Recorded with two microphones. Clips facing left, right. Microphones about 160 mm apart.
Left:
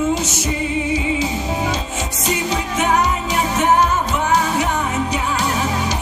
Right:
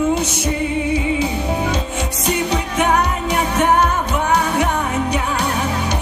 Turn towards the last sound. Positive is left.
turn(degrees=-60)  # may be behind; listen again after turning